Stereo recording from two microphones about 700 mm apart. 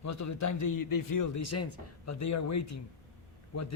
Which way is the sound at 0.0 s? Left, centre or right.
Left.